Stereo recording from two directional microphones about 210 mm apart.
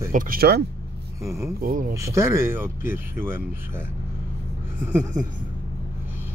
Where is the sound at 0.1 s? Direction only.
40° right (ahead or behind).